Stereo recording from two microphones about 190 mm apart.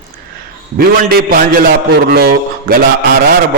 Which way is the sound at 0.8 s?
50° right (ahead or behind).